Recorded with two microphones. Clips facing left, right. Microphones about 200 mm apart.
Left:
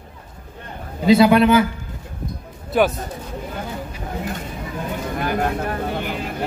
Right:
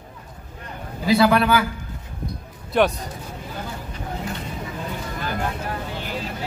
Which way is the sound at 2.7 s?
Centre (ahead or behind).